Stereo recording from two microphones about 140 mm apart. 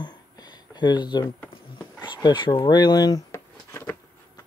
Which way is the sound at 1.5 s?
30° left (ahead or behind).